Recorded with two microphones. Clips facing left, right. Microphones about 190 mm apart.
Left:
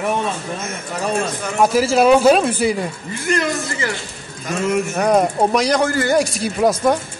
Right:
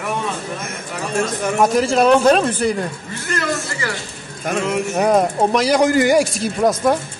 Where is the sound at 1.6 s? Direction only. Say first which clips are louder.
Left 1 dB; 5° left (ahead or behind).